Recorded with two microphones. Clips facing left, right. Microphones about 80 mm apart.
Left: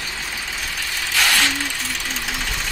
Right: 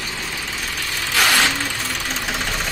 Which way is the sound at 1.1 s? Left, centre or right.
Centre.